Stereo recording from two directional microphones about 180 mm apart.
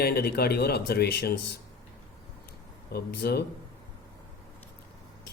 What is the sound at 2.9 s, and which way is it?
Speech, 60° left (ahead or behind).